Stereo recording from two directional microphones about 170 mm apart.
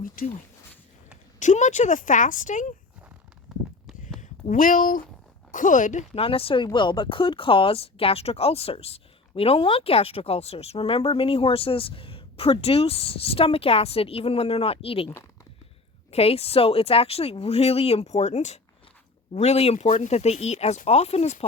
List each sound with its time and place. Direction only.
0.2 s speech: 55° left (ahead or behind)
1.4 s speech: 45° left (ahead or behind)
4.2 s speech: 50° left (ahead or behind)
16.1 s speech: 35° left (ahead or behind)